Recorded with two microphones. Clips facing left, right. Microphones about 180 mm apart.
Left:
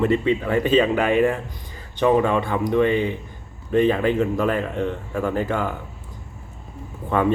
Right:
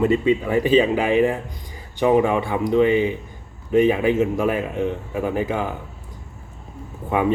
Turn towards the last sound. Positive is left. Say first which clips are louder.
# even
turn(degrees=-10)  # may be behind; listen again after turning